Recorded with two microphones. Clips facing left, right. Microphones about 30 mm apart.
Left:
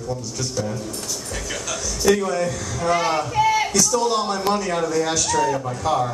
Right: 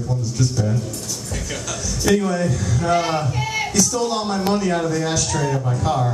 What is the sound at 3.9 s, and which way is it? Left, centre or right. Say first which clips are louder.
Speech: left 1 dB; centre.